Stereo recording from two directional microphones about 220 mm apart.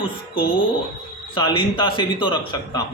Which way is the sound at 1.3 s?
20° left (ahead or behind).